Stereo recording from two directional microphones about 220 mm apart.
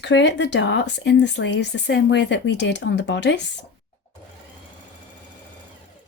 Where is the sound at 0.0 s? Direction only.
55° left (ahead or behind).